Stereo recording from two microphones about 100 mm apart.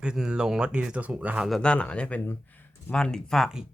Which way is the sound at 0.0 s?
10° right (ahead or behind).